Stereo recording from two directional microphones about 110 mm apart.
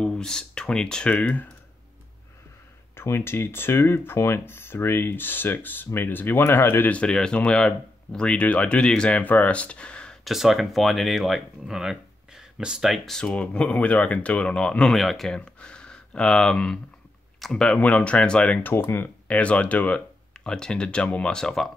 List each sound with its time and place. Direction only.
0.0 s speech: 5° left (ahead or behind)
3.0 s speech: 20° left (ahead or behind)
10.2 s speech: centre (ahead or behind)